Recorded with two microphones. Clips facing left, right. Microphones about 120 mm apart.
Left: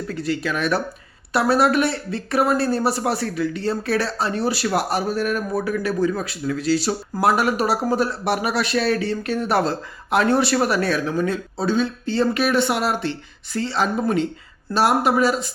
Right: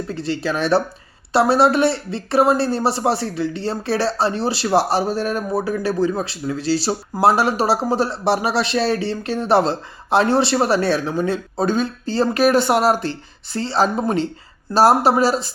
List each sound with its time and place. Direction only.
0.1 s speech: 30° right (ahead or behind)
11.5 s speech: 50° right (ahead or behind)